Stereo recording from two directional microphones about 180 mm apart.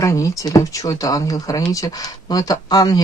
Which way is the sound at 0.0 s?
15° left (ahead or behind).